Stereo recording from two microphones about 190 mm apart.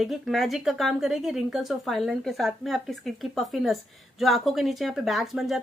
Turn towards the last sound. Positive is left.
turn(degrees=0)  # may be behind; listen again after turning